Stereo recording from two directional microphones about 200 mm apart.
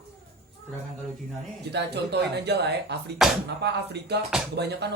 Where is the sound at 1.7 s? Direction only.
55° right (ahead or behind).